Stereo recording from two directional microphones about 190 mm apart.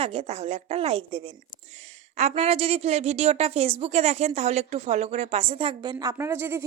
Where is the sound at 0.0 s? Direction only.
35° right (ahead or behind).